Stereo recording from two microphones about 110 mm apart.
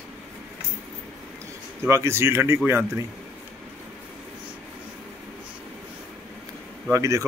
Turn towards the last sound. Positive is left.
turn(degrees=-30)  # may be behind; listen again after turning